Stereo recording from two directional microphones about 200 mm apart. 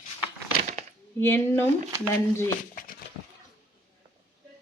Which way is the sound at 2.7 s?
45° left (ahead or behind).